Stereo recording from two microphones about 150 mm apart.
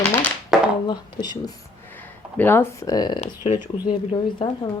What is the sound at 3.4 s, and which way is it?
Speech, 45° left (ahead or behind).